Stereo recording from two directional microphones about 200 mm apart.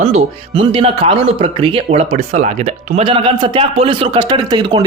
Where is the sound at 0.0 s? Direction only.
30° right (ahead or behind).